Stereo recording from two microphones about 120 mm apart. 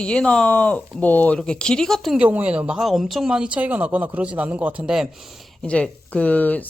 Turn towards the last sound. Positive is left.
turn(degrees=15)  # may be behind; listen again after turning